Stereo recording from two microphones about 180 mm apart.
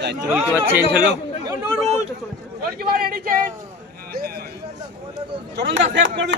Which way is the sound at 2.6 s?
55° right (ahead or behind).